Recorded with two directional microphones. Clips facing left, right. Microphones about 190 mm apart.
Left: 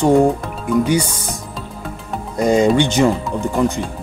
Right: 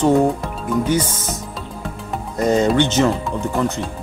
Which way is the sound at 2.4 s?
15° left (ahead or behind).